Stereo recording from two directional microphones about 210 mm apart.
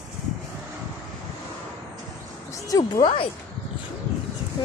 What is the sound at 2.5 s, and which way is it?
Speech, 15° left (ahead or behind).